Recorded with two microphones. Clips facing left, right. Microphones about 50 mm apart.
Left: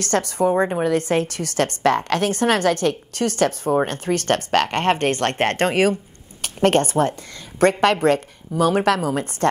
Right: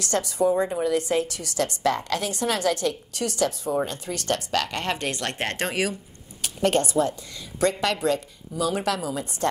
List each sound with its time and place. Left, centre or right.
0.0 s a woman's voice: left